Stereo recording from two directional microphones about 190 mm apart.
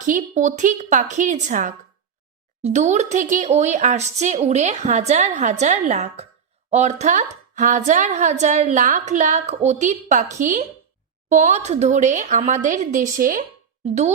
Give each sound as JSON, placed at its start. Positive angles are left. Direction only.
{"t": 0.0, "sound": "a woman's voice", "side_deg": -45}
{"t": 13.8, "sound": "a woman's voice", "side_deg": -35}